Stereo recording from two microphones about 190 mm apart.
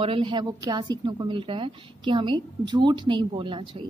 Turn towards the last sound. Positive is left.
turn(degrees=-25)  # may be behind; listen again after turning